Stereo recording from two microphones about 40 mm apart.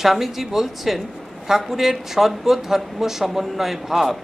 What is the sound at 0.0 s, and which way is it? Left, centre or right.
A man's voice, centre.